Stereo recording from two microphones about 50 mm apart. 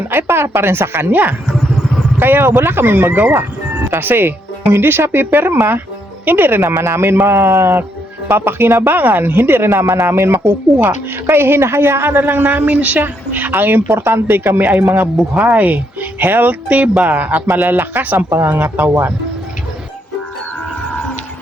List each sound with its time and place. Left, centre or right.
0.1 s speech: right
1.1 s speech: right
3.1 s speech: right
3.8 s speech: right
6.8 s speech: right
13.8 s speech: right
14.6 s speech: right
16.6 s speech: right
17.4 s speech: right
18.4 s speech: right